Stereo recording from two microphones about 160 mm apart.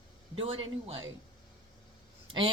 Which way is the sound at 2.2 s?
30° right (ahead or behind).